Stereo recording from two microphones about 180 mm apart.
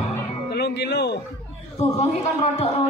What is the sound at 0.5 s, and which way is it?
Music, 65° left (ahead or behind).